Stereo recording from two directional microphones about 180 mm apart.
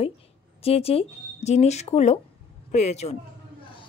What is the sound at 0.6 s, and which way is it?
A woman's voice, 35° left (ahead or behind).